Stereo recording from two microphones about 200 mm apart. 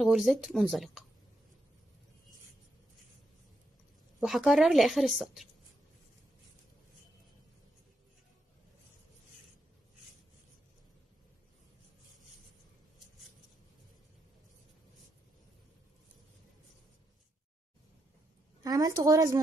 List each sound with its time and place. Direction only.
0.0 s a woman's voice: centre (ahead or behind)
4.2 s a woman's voice: centre (ahead or behind)
18.6 s a woman's voice: 15° right (ahead or behind)